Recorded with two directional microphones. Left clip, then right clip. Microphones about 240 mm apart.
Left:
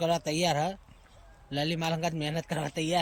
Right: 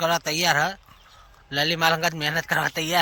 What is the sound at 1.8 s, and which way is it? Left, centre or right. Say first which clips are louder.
A man's voice: right 10 dB; right.